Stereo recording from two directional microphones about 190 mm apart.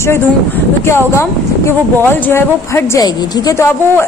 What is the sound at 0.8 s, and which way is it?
Speech, 15° left (ahead or behind).